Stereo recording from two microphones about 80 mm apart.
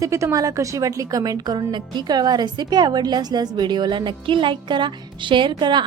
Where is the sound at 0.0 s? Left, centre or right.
Right.